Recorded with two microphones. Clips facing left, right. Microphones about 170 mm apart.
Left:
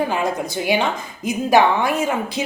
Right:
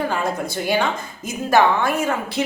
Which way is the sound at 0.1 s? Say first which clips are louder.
Left 1 dB; 15° left (ahead or behind).